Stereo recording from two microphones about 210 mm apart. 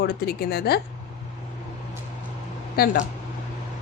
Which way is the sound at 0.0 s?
50° left (ahead or behind).